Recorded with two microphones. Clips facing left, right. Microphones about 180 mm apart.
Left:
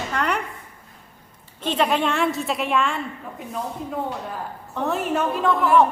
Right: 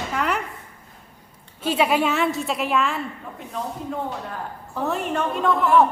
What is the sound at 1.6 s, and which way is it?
A woman's voice, 10° right (ahead or behind).